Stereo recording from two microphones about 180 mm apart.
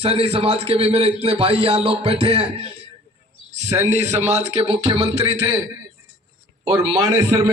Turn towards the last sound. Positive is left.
turn(degrees=-20)  # may be behind; listen again after turning